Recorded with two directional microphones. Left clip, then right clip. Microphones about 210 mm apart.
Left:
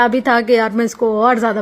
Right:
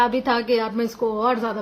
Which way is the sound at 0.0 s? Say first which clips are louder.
Left 6 dB; 35° left (ahead or behind).